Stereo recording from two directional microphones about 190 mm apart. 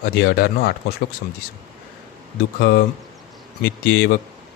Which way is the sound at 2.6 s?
60° left (ahead or behind).